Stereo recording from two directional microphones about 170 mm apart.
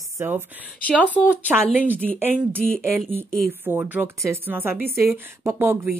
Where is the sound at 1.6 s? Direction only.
5° left (ahead or behind).